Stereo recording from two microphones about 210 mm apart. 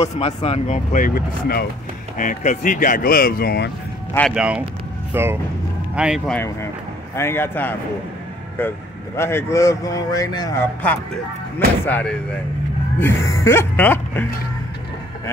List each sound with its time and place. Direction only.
0.0 s speech: 30° left (ahead or behind); by 3.7 s 50° left (ahead or behind)
4.3 s speech: 5° right (ahead or behind)